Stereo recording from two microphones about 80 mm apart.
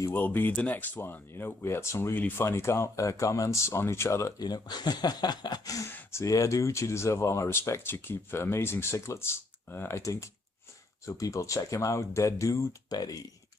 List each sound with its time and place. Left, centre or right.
0.1 s speech: left
1.3 s speech: left
2.1 s speech: left
2.4 s speech: left
4.4 s speech: left
5.9 s speech: left
6.2 s speech: left
11.1 s speech: left